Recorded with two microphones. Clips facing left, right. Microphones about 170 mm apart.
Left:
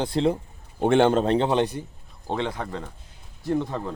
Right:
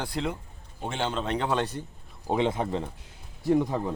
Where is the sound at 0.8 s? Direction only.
60° left (ahead or behind).